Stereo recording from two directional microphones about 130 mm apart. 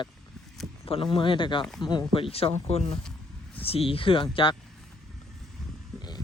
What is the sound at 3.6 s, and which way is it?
Speech, 45° left (ahead or behind).